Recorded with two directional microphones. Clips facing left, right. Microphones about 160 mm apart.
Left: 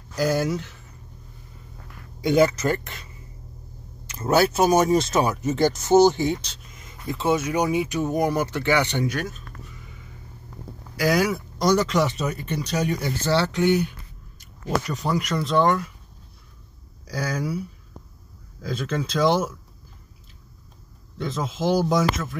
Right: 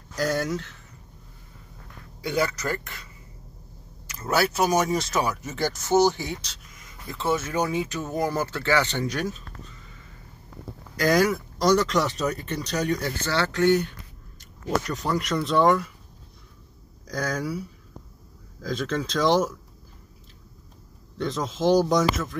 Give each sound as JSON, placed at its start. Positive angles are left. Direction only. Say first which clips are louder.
{"t": 0.1, "sound": "speech", "louder": "left 3 dB", "side_deg": 5}
{"t": 2.2, "sound": "speech", "louder": "left 7 dB", "side_deg": 20}
{"t": 4.1, "sound": "speech", "louder": "left 5 dB", "side_deg": 25}
{"t": 9.1, "sound": "speech", "louder": "even", "side_deg": 0}
{"t": 9.7, "sound": "a sound", "louder": "left 3 dB", "side_deg": 15}
{"t": 11.0, "sound": "speech", "louder": "right 1 dB", "side_deg": 5}
{"t": 17.1, "sound": "speech", "louder": "left 1 dB", "side_deg": 5}
{"t": 18.6, "sound": "speech", "louder": "even", "side_deg": 5}
{"t": 21.2, "sound": "speech", "louder": "right 1 dB", "side_deg": 5}